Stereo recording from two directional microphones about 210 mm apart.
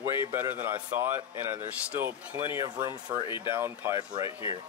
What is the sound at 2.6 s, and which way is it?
Speech, 20° right (ahead or behind).